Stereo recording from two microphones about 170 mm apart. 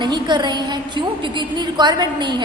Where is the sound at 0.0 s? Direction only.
25° right (ahead or behind).